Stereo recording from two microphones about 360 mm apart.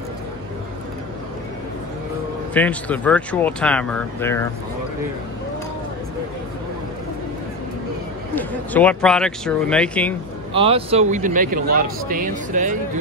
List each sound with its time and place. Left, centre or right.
2.5 s speech: centre
8.4 s speech: centre
10.5 s speech: centre